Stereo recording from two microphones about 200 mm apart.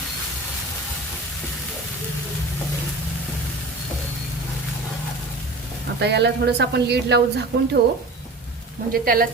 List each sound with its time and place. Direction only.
6.0 s speech: 55° right (ahead or behind)
8.9 s a woman's voice: 45° right (ahead or behind)